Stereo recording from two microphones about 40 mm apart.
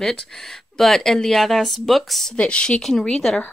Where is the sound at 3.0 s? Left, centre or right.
Left.